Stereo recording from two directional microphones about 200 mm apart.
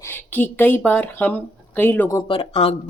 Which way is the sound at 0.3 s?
10° left (ahead or behind).